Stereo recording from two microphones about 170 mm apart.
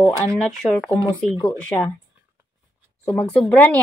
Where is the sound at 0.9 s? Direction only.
15° right (ahead or behind).